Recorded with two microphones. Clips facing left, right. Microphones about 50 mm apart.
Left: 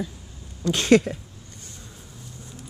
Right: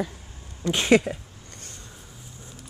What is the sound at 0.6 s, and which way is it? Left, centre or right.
Speech, centre.